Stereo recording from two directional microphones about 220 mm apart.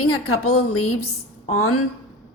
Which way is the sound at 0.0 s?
75° left (ahead or behind).